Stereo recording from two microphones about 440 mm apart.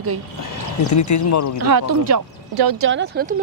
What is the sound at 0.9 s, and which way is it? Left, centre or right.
Speech, left.